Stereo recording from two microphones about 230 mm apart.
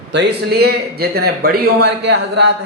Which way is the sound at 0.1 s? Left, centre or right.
Right.